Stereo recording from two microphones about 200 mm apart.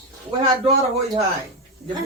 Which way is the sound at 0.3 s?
25° right (ahead or behind).